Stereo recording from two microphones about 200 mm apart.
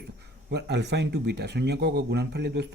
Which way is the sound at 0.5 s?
55° right (ahead or behind).